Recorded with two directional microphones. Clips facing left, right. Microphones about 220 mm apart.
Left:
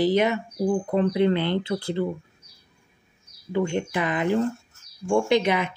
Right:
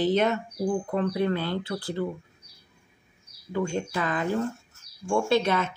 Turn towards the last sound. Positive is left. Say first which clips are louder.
# left 2 dB
turn(degrees=15)  # may be behind; listen again after turning